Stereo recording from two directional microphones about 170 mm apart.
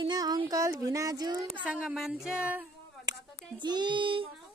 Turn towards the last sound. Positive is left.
turn(degrees=-30)  # may be behind; listen again after turning